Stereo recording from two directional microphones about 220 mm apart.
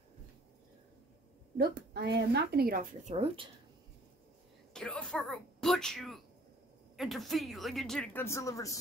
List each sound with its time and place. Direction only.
1.6 s speech: 50° right (ahead or behind); by 3.4 s 30° right (ahead or behind)
4.7 s speech: 5° left (ahead or behind)